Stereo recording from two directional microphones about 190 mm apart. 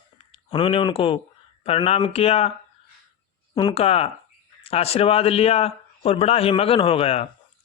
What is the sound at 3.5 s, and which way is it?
A man's voice, 25° left (ahead or behind).